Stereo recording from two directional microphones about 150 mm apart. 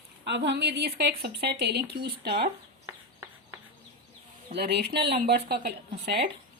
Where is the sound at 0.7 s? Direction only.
90° right.